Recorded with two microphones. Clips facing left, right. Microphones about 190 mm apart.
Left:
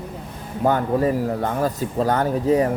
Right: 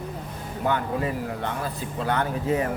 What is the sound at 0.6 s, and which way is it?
Speech, 40° left (ahead or behind).